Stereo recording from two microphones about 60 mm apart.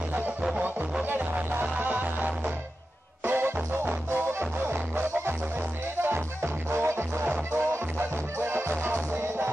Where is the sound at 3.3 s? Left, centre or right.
Right.